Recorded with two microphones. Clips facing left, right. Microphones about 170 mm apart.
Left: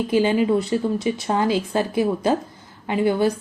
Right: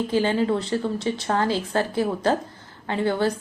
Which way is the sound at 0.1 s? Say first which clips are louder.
Left 5 dB; 15° left (ahead or behind).